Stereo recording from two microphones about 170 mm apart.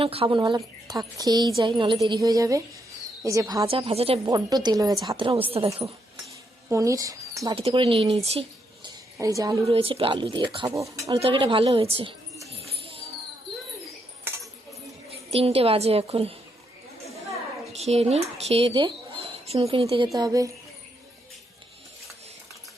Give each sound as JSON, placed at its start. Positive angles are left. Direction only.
{"t": 0.0, "sound": "a woman's voice", "side_deg": -35}
{"t": 4.3, "sound": "a woman's voice", "side_deg": -20}
{"t": 6.7, "sound": "speech", "side_deg": -20}
{"t": 7.5, "sound": "speech", "side_deg": -35}
{"t": 9.2, "sound": "a woman's voice", "side_deg": -20}
{"t": 9.6, "sound": "speech", "side_deg": -30}
{"t": 10.7, "sound": "speech", "side_deg": -20}
{"t": 11.2, "sound": "speech", "side_deg": -30}
{"t": 12.5, "sound": "music", "side_deg": -35}
{"t": 15.1, "sound": "a woman's voice", "side_deg": -35}
{"t": 17.7, "sound": "speech", "side_deg": -40}
{"t": 20.1, "sound": "a woman's voice", "side_deg": -20}